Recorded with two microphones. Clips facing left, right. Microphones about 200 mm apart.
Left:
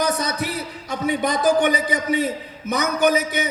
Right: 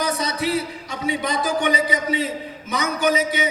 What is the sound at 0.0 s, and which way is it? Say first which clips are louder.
A man's voice: left 1 dB; 50° left (ahead or behind).